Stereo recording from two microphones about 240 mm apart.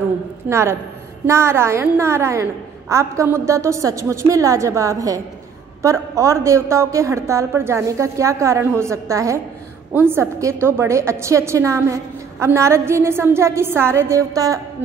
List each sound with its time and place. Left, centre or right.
0.5 s a woman's voice: centre